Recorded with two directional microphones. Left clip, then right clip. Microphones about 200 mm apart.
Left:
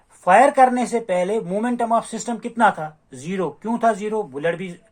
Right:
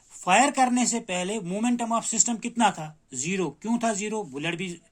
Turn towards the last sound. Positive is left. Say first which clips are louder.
# left 7 dB
turn(degrees=-30)  # may be behind; listen again after turning